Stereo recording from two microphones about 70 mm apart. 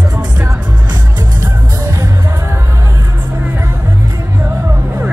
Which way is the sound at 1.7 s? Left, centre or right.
Right.